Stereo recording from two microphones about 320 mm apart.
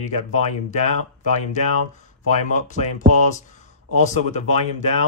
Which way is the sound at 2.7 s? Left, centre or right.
Left.